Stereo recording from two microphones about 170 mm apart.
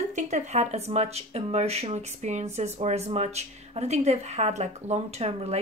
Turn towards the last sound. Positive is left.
turn(degrees=-40)  # may be behind; listen again after turning